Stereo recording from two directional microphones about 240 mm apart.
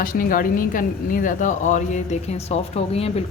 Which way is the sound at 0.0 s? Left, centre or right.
Left.